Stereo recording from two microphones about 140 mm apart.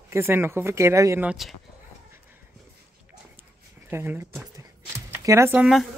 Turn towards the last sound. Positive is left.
turn(degrees=0)  # may be behind; listen again after turning